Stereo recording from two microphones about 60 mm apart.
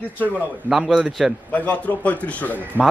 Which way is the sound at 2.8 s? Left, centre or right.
Right.